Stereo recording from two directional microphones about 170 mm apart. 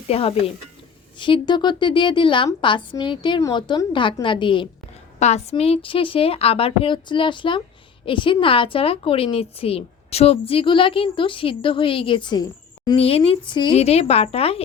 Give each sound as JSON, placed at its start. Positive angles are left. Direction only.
{"t": 0.1, "sound": "a woman's voice", "side_deg": 35}
{"t": 5.2, "sound": "a woman's voice", "side_deg": 40}
{"t": 13.0, "sound": "a woman's voice", "side_deg": 35}